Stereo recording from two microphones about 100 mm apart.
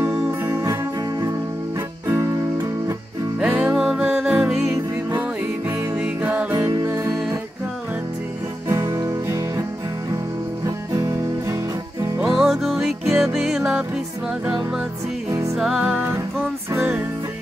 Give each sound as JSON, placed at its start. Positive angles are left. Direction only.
{"t": 0.0, "sound": "music", "side_deg": -25}
{"t": 2.0, "sound": "music", "side_deg": -30}
{"t": 3.3, "sound": "music", "side_deg": -10}
{"t": 5.9, "sound": "music", "side_deg": -15}
{"t": 6.8, "sound": "music", "side_deg": -30}
{"t": 8.6, "sound": "music", "side_deg": -30}
{"t": 12.2, "sound": "music", "side_deg": -5}
{"t": 15.2, "sound": "music", "side_deg": -30}
{"t": 15.5, "sound": "music", "side_deg": -5}